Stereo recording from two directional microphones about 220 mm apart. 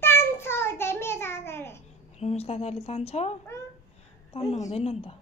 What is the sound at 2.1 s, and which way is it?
A woman's voice, 30° left (ahead or behind).